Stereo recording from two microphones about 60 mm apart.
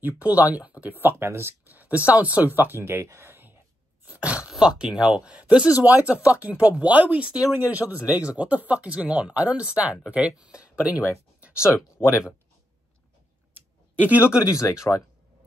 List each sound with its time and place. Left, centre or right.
0.0 s speech: right
1.2 s speech: right
1.7 s speech: right
4.0 s dog: right
4.5 s speech: centre
7.5 s speech: right
12.0 s speech: left
13.6 s a sound: right
14.5 s speech: left